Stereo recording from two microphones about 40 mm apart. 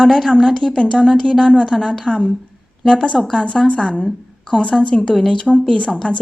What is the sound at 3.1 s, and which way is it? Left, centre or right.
Speech, centre.